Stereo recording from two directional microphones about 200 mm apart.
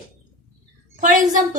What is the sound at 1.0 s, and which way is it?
Speech, 40° right (ahead or behind).